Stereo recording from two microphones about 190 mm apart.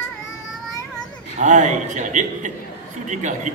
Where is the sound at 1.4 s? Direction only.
40° right (ahead or behind).